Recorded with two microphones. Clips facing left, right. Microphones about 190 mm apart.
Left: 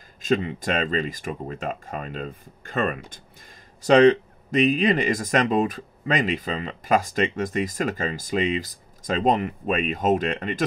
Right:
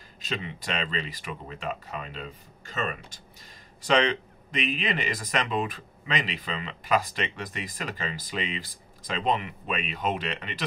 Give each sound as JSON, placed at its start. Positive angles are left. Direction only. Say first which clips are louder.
{"t": 0.2, "sound": "speech", "louder": "left 11 dB", "side_deg": 45}